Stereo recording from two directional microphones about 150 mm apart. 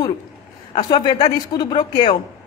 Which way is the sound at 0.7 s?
30° left (ahead or behind).